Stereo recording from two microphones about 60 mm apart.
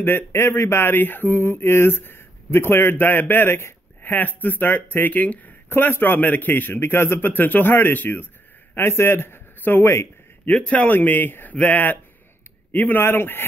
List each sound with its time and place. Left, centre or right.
0.0 s mantra: left
5.1 s speech: left
5.7 s mantra: left
8.7 s a man's voice: left
9.6 s speech: left
10.5 s speech: left
11.0 s mantra: left
11.5 s speech: left
13.0 s mantra: left